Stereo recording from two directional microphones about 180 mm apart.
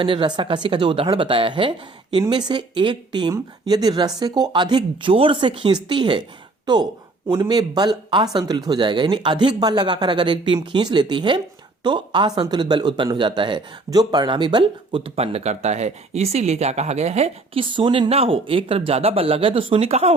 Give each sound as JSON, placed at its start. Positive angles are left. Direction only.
{"t": 0.0, "sound": "speech", "side_deg": -30}
{"t": 7.3, "sound": "speech", "side_deg": -20}